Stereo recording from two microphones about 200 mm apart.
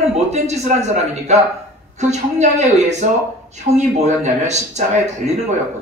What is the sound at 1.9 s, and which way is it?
Speech, 35° right (ahead or behind).